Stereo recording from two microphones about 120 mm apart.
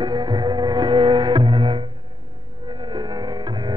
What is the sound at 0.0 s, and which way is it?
Music, 40° right (ahead or behind).